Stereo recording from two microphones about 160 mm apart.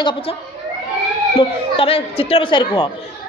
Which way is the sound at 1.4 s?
35° left (ahead or behind).